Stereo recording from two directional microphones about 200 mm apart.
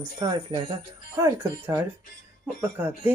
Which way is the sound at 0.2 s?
20° right (ahead or behind).